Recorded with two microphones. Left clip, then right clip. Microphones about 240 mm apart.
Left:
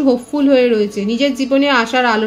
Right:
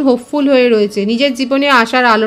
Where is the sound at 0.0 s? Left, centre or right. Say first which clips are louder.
Right 2 dB; right.